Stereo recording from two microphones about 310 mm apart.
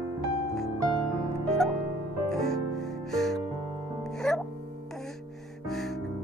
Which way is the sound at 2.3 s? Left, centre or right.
Centre.